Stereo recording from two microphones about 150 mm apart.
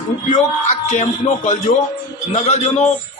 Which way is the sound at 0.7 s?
55° left (ahead or behind).